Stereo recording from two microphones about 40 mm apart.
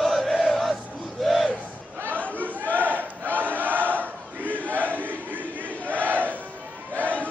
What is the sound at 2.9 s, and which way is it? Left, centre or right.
Crowd, right.